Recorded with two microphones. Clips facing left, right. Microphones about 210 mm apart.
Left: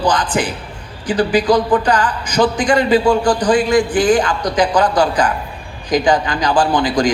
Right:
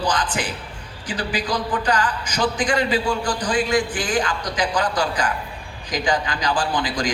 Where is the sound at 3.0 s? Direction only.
70° left (ahead or behind).